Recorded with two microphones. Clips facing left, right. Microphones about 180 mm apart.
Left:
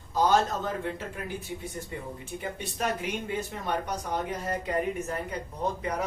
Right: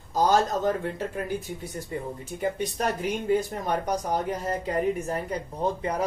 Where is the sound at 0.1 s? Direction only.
40° right (ahead or behind).